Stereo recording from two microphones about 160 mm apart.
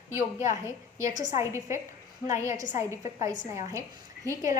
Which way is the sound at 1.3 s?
20° right (ahead or behind).